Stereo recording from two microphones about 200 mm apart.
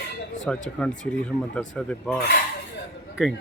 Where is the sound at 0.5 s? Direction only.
5° left (ahead or behind).